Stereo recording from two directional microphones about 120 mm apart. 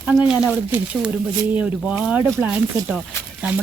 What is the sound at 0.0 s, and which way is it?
Speech, 10° right (ahead or behind).